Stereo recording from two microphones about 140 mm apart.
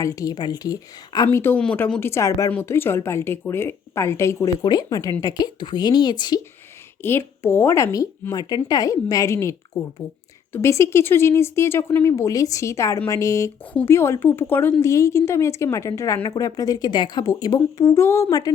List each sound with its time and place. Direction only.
0.0 s speech: 25° left (ahead or behind)
1.4 s speech: 15° left (ahead or behind)
7.0 s speech: 15° left (ahead or behind)